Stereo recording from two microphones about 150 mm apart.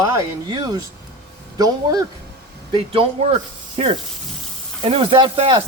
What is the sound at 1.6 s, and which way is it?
Speech, 25° right (ahead or behind).